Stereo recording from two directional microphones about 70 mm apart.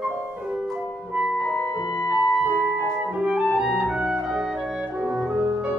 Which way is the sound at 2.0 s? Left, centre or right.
Centre.